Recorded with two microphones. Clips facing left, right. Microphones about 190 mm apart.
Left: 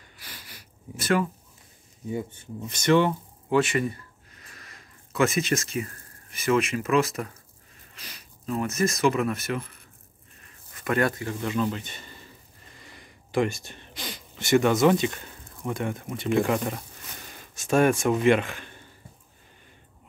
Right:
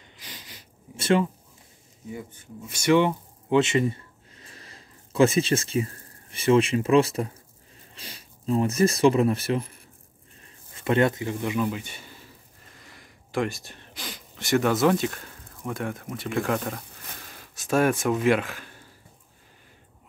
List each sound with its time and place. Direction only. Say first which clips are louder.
0.2 s sniff: right 1 dB; 20° right (ahead or behind)
2.0 s speech: left 6 dB; 25° left (ahead or behind)
2.6 s speech: right 1 dB; 10° right (ahead or behind)